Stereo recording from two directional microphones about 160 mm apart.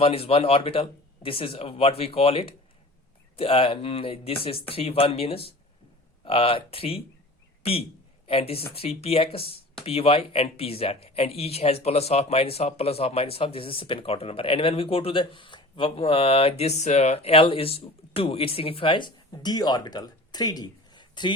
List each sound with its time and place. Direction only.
0.0 s speech: 35° left (ahead or behind)